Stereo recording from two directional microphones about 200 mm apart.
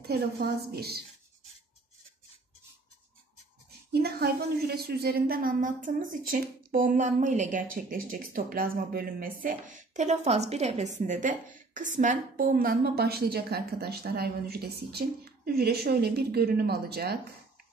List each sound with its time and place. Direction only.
0.0 s speech: 50° right (ahead or behind)
3.9 s speech: 50° right (ahead or behind)